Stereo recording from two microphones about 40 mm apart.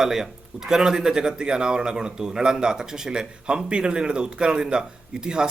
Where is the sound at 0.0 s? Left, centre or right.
Centre.